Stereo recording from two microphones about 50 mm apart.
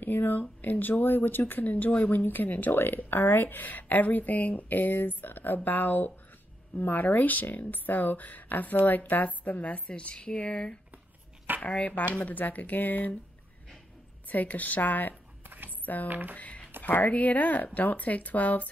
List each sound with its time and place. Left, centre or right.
0.0 s speech: left
14.3 s speech: left
16.1 s speech: right
16.3 s speech: left